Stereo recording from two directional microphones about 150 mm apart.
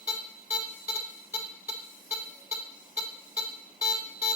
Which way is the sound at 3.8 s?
5° right (ahead or behind).